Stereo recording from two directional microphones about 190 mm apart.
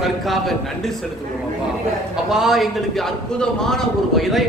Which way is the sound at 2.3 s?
Centre (ahead or behind).